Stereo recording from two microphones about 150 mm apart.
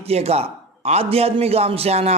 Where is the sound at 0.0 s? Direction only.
45° right (ahead or behind).